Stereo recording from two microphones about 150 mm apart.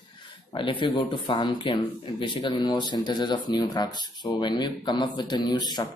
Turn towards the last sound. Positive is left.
turn(degrees=30)  # may be behind; listen again after turning